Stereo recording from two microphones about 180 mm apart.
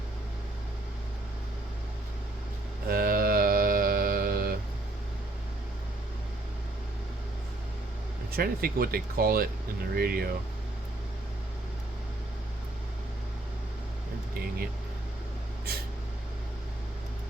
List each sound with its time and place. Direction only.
2.9 s mantra: 55° right (ahead or behind)
8.3 s speech: 55° right (ahead or behind)